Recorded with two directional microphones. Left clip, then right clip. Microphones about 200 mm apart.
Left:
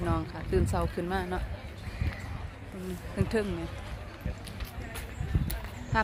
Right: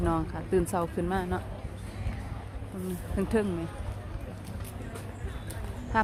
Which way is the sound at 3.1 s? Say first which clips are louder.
Right 2 dB; 5° right (ahead or behind).